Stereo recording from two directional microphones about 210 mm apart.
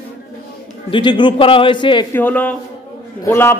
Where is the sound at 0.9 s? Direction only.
20° left (ahead or behind).